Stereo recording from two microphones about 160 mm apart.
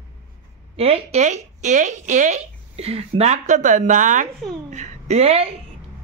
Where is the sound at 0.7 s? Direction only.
40° right (ahead or behind).